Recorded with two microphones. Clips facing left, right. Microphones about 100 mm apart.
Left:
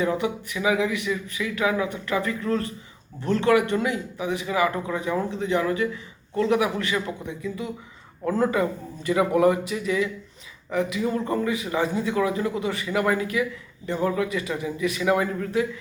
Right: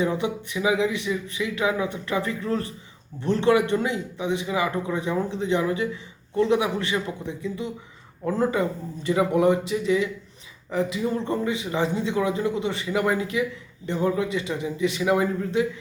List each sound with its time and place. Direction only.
0.0 s speech: 25° right (ahead or behind)